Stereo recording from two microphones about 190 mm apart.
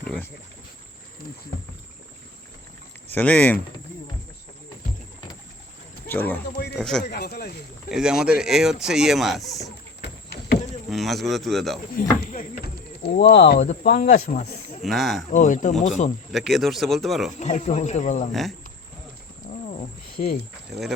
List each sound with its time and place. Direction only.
3.1 s speech: 10° left (ahead or behind)
6.1 s speech: 10° left (ahead or behind)
7.0 s speech: 55° left (ahead or behind)
7.9 s speech: 5° right (ahead or behind)
10.8 s speech: centre (ahead or behind)
11.9 s speech: 45° left (ahead or behind)
12.6 s speech: 60° left (ahead or behind)
14.8 s speech: centre (ahead or behind)
15.3 s speech: 40° left (ahead or behind)
16.3 s speech: centre (ahead or behind)
17.4 s speech: 35° left (ahead or behind)
18.3 s speech: centre (ahead or behind)
19.6 s wild animals: 40° left (ahead or behind)
20.7 s speech: centre (ahead or behind)